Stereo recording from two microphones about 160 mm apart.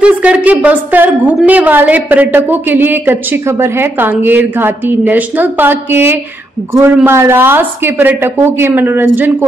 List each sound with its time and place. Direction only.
0.0 s a woman's voice: 10° right (ahead or behind)